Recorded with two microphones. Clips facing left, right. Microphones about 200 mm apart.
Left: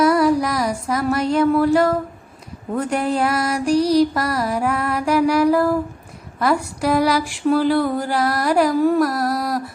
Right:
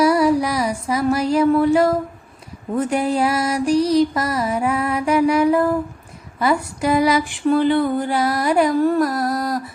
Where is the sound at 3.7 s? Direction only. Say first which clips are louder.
Left 1 dB; 30° left (ahead or behind).